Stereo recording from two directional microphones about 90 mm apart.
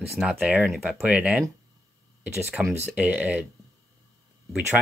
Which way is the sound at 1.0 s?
15° right (ahead or behind).